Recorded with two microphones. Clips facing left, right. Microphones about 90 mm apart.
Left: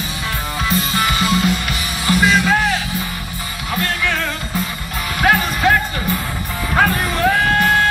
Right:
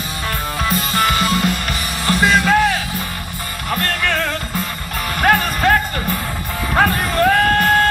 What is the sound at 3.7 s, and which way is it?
Music, 50° right (ahead or behind).